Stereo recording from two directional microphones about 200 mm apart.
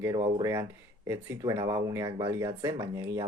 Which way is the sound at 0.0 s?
15° right (ahead or behind).